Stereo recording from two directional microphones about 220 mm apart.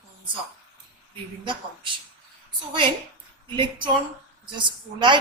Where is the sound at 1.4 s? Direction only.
20° right (ahead or behind).